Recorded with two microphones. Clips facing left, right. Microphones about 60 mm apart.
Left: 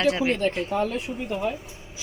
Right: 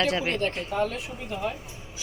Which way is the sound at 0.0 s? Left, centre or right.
Centre.